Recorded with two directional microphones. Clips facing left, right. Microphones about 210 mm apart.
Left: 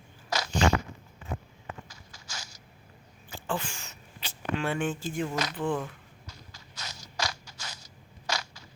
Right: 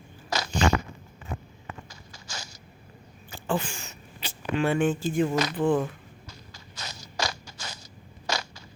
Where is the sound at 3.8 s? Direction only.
5° right (ahead or behind).